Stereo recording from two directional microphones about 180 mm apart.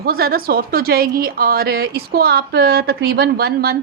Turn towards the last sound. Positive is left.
turn(degrees=-60)  # may be behind; listen again after turning